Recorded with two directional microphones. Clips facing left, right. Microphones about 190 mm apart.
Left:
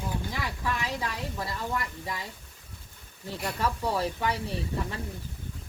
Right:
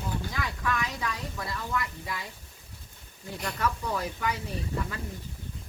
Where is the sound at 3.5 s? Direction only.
30° left (ahead or behind).